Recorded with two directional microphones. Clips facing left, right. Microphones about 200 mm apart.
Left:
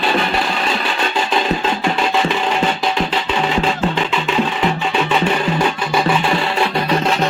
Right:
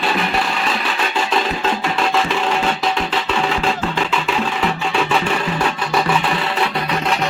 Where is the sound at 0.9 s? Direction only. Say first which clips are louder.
Left 2 dB; 30° left (ahead or behind).